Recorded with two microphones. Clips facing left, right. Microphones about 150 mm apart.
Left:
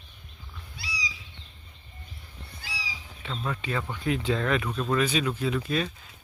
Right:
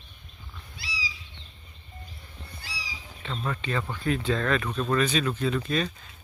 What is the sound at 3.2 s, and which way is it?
Speech, 5° left (ahead or behind).